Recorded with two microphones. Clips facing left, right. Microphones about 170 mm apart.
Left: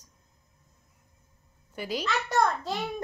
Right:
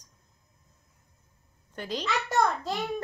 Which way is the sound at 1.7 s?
10° left (ahead or behind).